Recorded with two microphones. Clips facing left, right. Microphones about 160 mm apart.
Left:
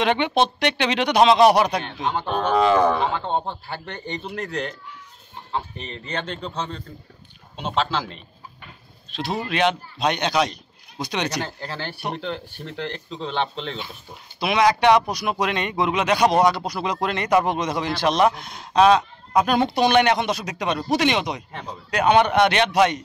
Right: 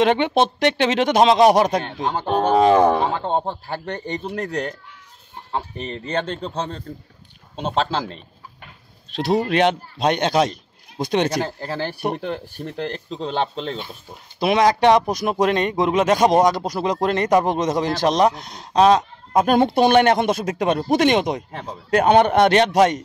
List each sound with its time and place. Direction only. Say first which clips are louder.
0.0 s speech: right 3 dB; 40° right (ahead or behind)
2.5 s speech: right 3 dB; 25° right (ahead or behind)
2.9 s a man's voice: right 3 dB; 45° right (ahead or behind)
9.3 s speech: right 5 dB; 40° right (ahead or behind)
12.5 s a man's voice: right 3 dB; 40° right (ahead or behind)